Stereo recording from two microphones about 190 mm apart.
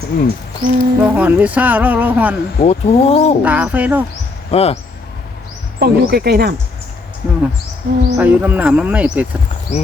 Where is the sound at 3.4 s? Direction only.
10° right (ahead or behind).